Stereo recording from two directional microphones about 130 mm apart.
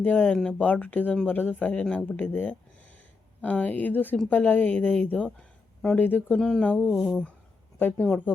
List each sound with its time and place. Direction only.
0.0 s speech: 15° left (ahead or behind)
8.0 s speech: 5° left (ahead or behind)